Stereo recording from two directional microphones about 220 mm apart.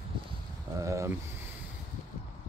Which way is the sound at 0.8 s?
15° right (ahead or behind).